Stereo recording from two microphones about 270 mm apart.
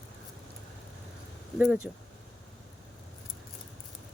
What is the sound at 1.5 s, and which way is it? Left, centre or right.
Speech, centre.